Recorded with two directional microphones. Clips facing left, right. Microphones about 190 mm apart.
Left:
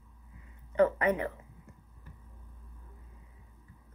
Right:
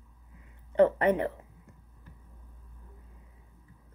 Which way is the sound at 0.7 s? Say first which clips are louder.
Right 3 dB; 30° right (ahead or behind).